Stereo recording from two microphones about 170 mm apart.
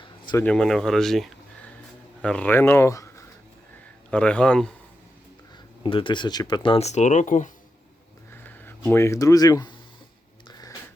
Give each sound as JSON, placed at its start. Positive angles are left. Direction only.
{"t": 0.3, "sound": "speech", "side_deg": 5}
{"t": 4.1, "sound": "speech", "side_deg": 5}
{"t": 5.8, "sound": "speech", "side_deg": 30}
{"t": 8.4, "sound": "speech", "side_deg": 15}